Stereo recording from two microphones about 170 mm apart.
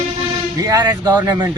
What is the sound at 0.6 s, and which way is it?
Speech, 25° right (ahead or behind).